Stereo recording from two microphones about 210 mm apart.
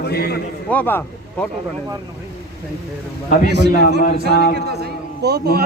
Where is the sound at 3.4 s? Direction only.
55° right (ahead or behind).